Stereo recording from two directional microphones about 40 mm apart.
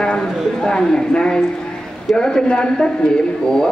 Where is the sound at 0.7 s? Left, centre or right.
Left.